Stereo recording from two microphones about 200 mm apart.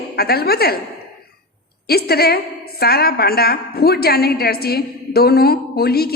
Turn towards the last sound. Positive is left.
turn(degrees=50)  # may be behind; listen again after turning